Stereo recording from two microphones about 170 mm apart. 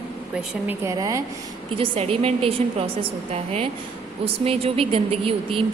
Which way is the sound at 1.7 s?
35° right (ahead or behind).